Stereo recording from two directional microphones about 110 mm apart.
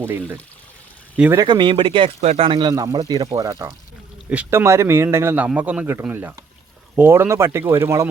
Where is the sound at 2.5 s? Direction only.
45° right (ahead or behind).